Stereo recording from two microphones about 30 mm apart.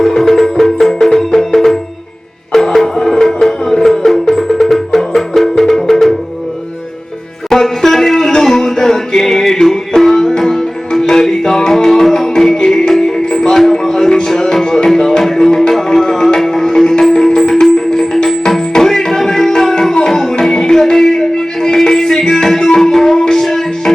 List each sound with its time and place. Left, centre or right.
0.0 s music: centre
7.5 s music: centre
18.3 s music: centre